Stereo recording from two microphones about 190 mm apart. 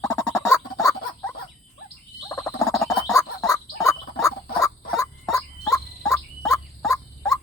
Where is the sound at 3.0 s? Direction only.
15° left (ahead or behind).